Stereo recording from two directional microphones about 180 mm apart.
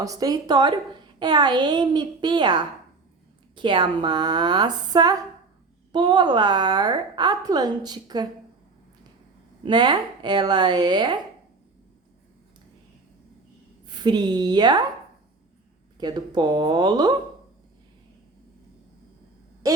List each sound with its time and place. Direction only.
0.0 s a woman's voice: 20° right (ahead or behind)
9.6 s a woman's voice: 25° right (ahead or behind)
13.8 s a woman's voice: 25° right (ahead or behind)
16.0 s a woman's voice: 25° right (ahead or behind)